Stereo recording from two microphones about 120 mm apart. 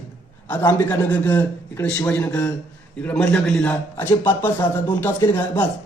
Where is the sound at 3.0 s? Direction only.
10° left (ahead or behind).